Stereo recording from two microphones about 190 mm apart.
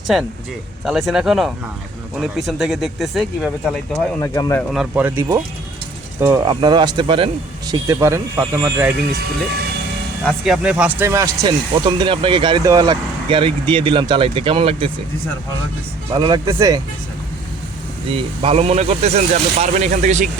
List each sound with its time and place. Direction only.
0.9 s speech: centre (ahead or behind)
4.2 s speech: 15° left (ahead or behind)
4.7 s speech: 5° right (ahead or behind)
10.2 s speech: centre (ahead or behind)
11.9 s speech: 25° right (ahead or behind)
16.1 s speech: 20° right (ahead or behind)
18.1 s speech: 30° right (ahead or behind)